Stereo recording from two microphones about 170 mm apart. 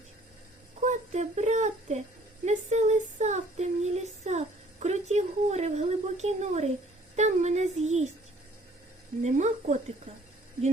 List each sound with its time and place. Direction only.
0.8 s speech: 45° right (ahead or behind)
9.2 s speech: 40° right (ahead or behind)